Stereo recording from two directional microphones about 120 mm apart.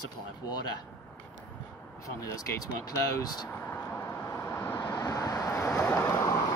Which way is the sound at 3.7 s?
15° left (ahead or behind).